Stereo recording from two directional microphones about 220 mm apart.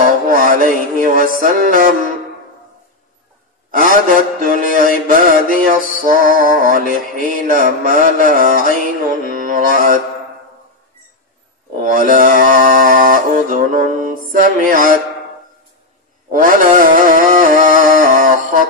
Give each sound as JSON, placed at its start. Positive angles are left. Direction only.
{"t": 0.0, "sound": "music", "side_deg": -40}
{"t": 1.4, "sound": "mantra", "side_deg": -40}
{"t": 3.7, "sound": "a man's voice", "side_deg": -40}
{"t": 5.2, "sound": "mantra", "side_deg": -40}
{"t": 11.8, "sound": "mantra", "side_deg": -40}
{"t": 16.3, "sound": "a sound", "side_deg": -40}